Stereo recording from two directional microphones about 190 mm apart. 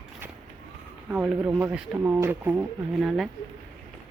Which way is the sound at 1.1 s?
10° right (ahead or behind).